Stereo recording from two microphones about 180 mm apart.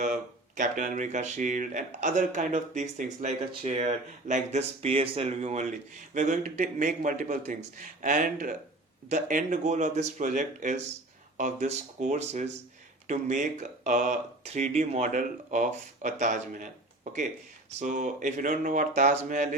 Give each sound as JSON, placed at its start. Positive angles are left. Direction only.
{"t": 0.0, "sound": "a man's voice", "side_deg": -45}